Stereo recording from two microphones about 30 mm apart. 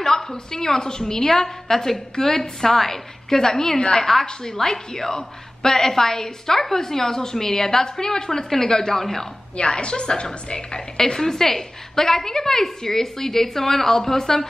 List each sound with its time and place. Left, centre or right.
0.0 s a woman's voice: centre
9.6 s a woman's voice: left; by 14.5 s centre